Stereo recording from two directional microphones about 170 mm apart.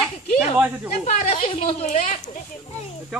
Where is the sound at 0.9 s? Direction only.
40° left (ahead or behind).